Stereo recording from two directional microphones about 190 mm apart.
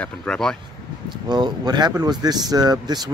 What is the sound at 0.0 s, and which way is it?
Speech, 5° left (ahead or behind).